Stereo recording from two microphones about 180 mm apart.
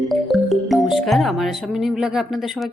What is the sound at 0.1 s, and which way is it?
Speech, centre (ahead or behind).